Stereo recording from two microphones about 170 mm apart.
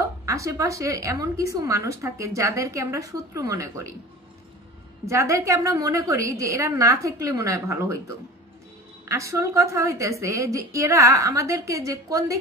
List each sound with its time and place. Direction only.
0.2 s a woman's voice: 20° right (ahead or behind)
5.0 s a woman's voice: 15° right (ahead or behind)
9.0 s a woman's voice: 15° right (ahead or behind)